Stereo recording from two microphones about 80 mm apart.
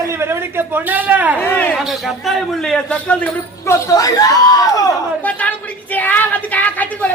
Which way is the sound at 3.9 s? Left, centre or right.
Left.